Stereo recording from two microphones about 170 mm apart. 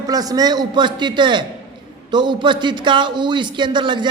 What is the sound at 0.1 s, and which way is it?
A man's voice, 20° right (ahead or behind).